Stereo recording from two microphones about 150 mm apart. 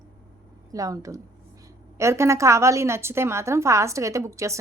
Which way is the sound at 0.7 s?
25° right (ahead or behind).